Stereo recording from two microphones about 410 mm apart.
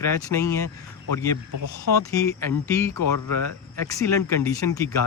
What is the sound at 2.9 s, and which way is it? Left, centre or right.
Speech, left.